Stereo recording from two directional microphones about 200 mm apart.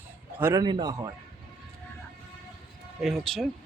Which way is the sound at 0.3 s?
15° right (ahead or behind).